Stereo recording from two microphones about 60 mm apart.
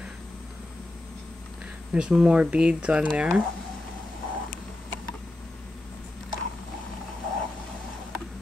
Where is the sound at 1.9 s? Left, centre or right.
Centre.